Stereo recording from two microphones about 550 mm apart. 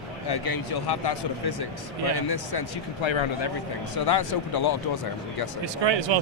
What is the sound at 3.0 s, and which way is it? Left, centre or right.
Speech, left.